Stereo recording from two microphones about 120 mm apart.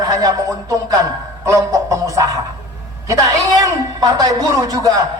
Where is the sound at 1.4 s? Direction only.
25° right (ahead or behind).